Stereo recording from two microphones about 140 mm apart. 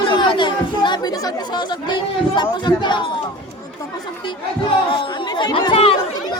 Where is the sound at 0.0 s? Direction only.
35° left (ahead or behind).